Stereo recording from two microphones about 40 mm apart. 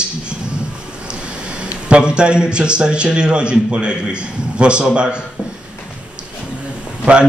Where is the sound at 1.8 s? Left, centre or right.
Right.